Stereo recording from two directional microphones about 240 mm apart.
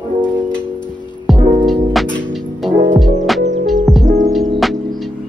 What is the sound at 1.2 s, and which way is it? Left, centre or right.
Music, centre.